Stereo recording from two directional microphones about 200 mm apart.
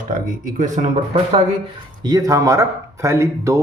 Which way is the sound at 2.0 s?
20° right (ahead or behind).